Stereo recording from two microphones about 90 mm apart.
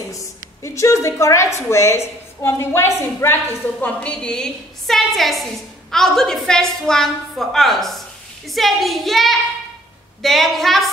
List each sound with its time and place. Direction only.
0.1 s a woman's voice: 35° left (ahead or behind)
3.8 s a woman's voice: 15° left (ahead or behind)